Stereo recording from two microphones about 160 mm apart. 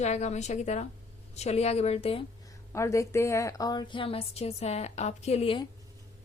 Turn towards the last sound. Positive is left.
turn(degrees=35)  # may be behind; listen again after turning